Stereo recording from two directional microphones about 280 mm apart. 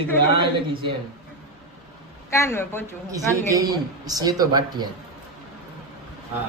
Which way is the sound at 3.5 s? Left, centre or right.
Centre.